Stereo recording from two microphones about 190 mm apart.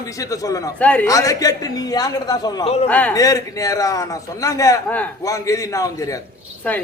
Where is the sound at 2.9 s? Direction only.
10° left (ahead or behind).